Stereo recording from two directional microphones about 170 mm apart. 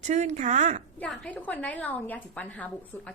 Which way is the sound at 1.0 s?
5° left (ahead or behind).